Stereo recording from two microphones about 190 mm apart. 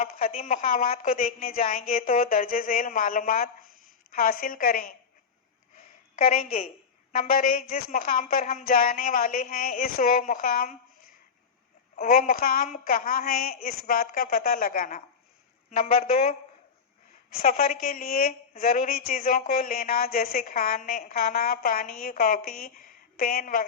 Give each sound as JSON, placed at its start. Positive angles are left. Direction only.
{"t": 0.0, "sound": "a woman's voice", "side_deg": 35}
{"t": 1.7, "sound": "speech", "side_deg": 45}
{"t": 5.7, "sound": "a sound", "side_deg": 35}
{"t": 7.1, "sound": "a woman's voice", "side_deg": 45}
{"t": 17.4, "sound": "a woman's voice", "side_deg": 35}
{"t": 17.8, "sound": "speech", "side_deg": 50}